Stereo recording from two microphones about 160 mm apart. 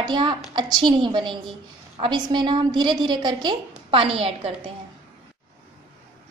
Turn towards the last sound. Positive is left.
turn(degrees=-35)  # may be behind; listen again after turning